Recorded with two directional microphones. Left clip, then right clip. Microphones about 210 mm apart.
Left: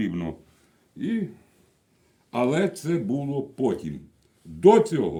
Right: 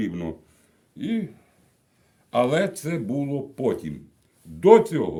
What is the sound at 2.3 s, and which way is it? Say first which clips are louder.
Speech: right 3 dB; 50° right (ahead or behind).